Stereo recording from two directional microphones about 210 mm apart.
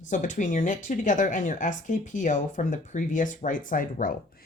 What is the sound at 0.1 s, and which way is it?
Speech, 35° left (ahead or behind).